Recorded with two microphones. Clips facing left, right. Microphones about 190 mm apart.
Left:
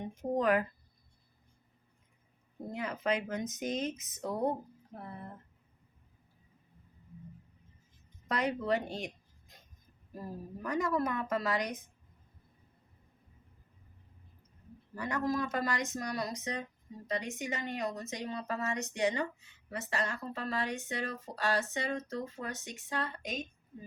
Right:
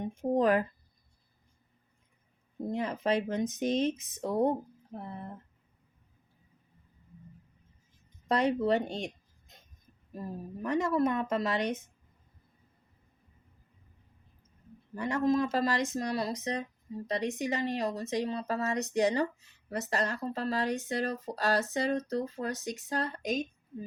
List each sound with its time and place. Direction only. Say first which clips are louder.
0.1 s speech: right 3 dB; 30° right (ahead or behind)
2.7 s speech: right 4 dB; 30° right (ahead or behind)
8.3 s speech: right 5 dB; 30° right (ahead or behind)
10.6 s speech: right 4 dB; 25° right (ahead or behind)
14.9 s speech: right 5 dB; 25° right (ahead or behind)